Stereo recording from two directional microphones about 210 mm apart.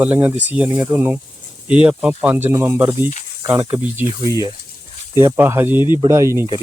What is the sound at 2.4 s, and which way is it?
Speech, 15° right (ahead or behind).